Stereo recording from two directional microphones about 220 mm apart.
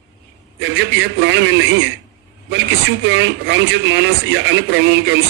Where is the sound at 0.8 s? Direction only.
55° right (ahead or behind).